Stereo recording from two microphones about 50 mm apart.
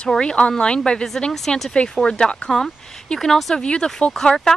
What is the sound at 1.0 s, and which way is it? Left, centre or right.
Speech, centre.